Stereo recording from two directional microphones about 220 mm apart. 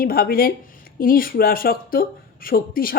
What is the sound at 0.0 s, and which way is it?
Speech, 40° left (ahead or behind).